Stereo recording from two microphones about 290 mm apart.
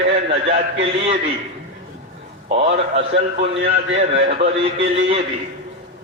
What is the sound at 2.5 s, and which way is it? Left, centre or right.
Speech, right.